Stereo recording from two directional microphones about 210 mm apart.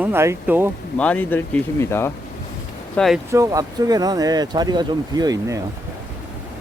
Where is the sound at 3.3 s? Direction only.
15° right (ahead or behind).